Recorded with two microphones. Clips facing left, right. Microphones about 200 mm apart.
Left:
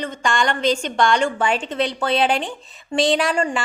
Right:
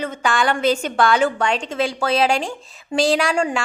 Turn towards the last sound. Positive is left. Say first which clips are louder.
# right 1 dB
turn(degrees=0)  # may be behind; listen again after turning